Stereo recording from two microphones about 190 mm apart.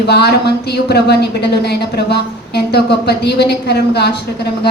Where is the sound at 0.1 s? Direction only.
60° left (ahead or behind).